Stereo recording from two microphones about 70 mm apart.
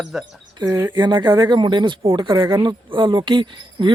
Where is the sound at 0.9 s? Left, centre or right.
Right.